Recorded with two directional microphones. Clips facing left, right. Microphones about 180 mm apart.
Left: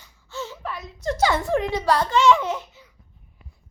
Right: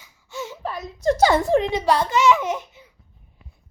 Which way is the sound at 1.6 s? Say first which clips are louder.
Right 2 dB; 20° right (ahead or behind).